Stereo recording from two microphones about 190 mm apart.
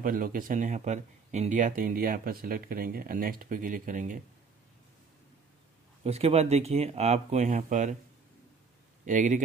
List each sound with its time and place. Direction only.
0.0 s speech: 45° right (ahead or behind)
6.0 s speech: 35° right (ahead or behind)
9.0 s speech: 40° right (ahead or behind)